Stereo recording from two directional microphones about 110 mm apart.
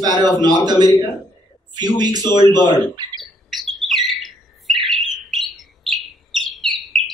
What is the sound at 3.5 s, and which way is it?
Bird, centre (ahead or behind).